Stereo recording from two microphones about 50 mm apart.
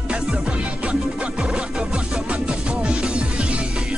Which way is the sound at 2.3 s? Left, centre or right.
Right.